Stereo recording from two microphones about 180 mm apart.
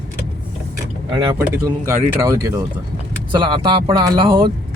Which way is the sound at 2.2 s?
20° right (ahead or behind).